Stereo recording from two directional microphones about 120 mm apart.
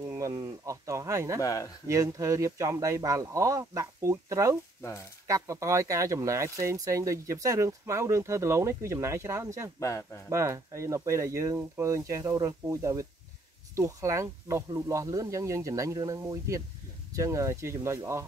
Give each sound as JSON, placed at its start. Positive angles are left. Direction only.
{"t": 0.1, "sound": "speech", "side_deg": -30}
{"t": 1.4, "sound": "speech", "side_deg": 30}
{"t": 1.9, "sound": "speech", "side_deg": -25}
{"t": 9.8, "sound": "speech", "side_deg": 25}
{"t": 10.3, "sound": "speech", "side_deg": -25}